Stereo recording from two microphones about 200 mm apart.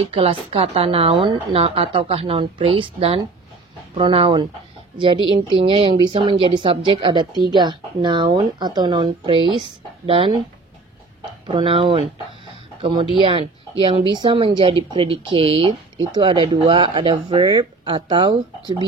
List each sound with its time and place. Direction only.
0.1 s a woman's voice: 30° right (ahead or behind)
11.4 s a woman's voice: 25° right (ahead or behind)